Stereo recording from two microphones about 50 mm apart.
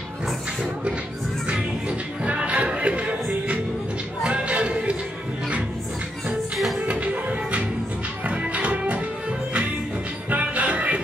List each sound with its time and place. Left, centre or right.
1.5 s music: right
6.5 s music: centre
6.9 s music: right
10.3 s music: right